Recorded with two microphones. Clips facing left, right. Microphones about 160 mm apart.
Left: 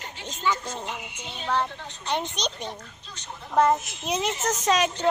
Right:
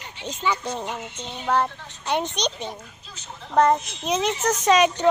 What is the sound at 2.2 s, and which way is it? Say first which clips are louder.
A child's voice: right 4 dB; centre (ahead or behind).